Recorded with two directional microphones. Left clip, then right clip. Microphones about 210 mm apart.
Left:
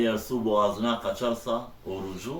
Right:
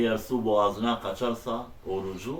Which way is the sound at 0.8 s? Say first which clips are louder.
Left 1 dB; 10° right (ahead or behind).